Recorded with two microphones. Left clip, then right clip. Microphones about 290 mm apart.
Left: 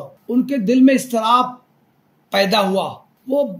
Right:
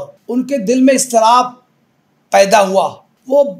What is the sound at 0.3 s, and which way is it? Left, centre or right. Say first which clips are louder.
A man's voice: right 3 dB; centre.